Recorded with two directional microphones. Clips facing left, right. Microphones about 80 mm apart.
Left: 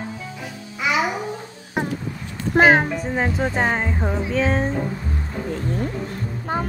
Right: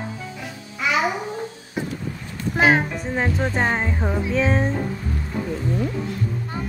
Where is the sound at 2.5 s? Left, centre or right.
Left.